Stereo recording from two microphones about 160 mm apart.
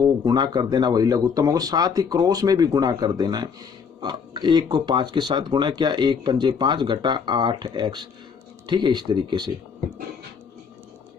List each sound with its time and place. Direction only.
0.0 s speech: 25° right (ahead or behind)